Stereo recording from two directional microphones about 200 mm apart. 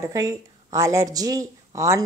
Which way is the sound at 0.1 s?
15° right (ahead or behind).